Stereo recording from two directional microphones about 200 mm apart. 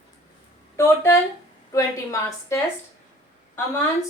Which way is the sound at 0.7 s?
15° left (ahead or behind).